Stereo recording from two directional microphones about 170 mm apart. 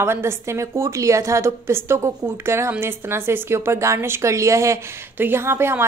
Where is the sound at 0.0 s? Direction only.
15° right (ahead or behind).